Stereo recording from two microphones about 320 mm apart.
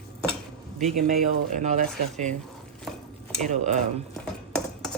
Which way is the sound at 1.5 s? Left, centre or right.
Right.